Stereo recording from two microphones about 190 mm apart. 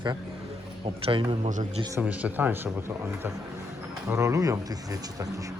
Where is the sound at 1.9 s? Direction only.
10° right (ahead or behind).